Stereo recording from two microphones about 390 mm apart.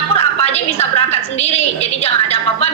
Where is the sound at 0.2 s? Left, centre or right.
Centre.